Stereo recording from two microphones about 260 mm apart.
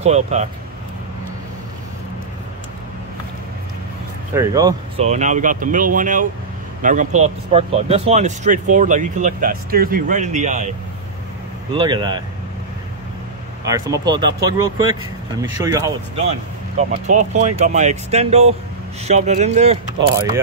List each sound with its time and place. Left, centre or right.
0.0 s speech: right
4.3 s speech: centre
5.0 s speech: right
11.7 s speech: centre
13.7 s speech: centre
15.5 s speech: centre
16.3 s speech: right